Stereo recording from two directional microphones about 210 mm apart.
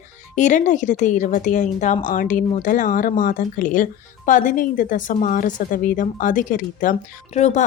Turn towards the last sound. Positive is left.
turn(degrees=35)  # may be behind; listen again after turning